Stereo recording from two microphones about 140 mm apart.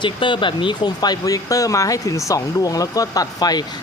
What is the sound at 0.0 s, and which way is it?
Speech, 35° left (ahead or behind).